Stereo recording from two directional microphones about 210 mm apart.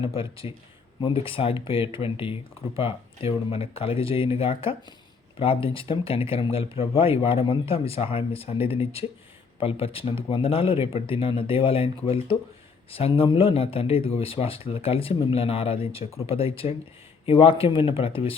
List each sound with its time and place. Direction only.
0.0 s speech: 25° left (ahead or behind)